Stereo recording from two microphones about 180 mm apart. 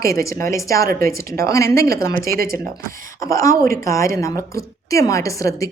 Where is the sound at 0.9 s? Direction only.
55° right (ahead or behind).